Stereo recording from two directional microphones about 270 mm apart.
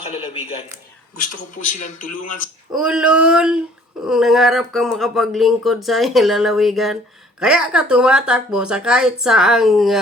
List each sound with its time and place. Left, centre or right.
0.0 s speech: left
1.6 s speech: left
2.7 s speech: centre